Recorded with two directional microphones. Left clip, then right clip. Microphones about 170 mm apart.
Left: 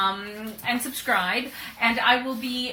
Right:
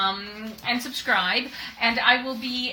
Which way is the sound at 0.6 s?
15° right (ahead or behind).